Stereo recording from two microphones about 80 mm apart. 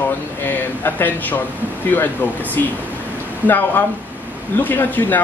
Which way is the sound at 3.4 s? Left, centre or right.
Left.